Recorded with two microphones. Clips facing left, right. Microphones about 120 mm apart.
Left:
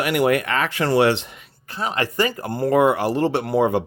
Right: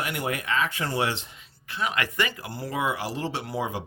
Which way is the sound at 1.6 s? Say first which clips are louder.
Left 4 dB; 35° left (ahead or behind).